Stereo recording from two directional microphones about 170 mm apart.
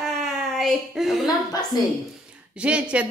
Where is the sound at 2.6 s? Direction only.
5° right (ahead or behind).